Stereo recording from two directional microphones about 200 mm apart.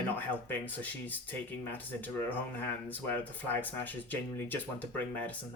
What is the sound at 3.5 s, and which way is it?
Speech, 10° left (ahead or behind).